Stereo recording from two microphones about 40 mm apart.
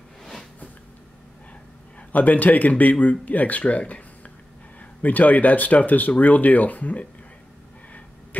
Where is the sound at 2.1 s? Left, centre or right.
Left.